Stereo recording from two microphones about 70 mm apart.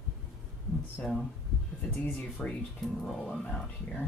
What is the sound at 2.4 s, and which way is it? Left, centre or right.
Speech, centre.